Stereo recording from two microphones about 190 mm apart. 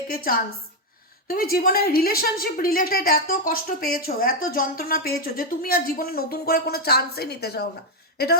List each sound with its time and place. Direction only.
1.3 s a woman's voice: 50° left (ahead or behind)